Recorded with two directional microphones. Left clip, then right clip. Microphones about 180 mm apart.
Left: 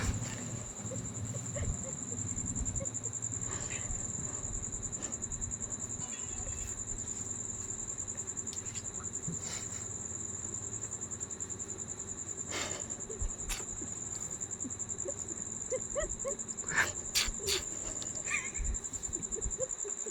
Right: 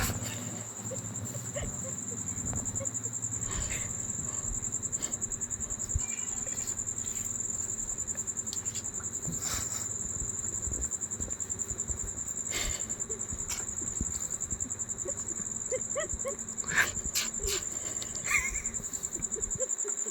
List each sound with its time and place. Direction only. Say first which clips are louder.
12.5 s insect: right 3 dB; 15° left (ahead or behind)
15.7 s dog: right 2 dB; 10° left (ahead or behind)
17.2 s cricket: left 2 dB; 25° left (ahead or behind)
18.3 s a sound: right 7 dB; 15° right (ahead or behind)